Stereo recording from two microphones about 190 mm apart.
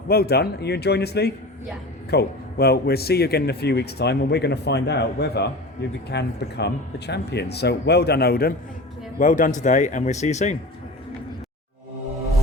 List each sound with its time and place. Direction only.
0.1 s a man's voice: 55° left (ahead or behind)
9.1 s speech: 45° left (ahead or behind)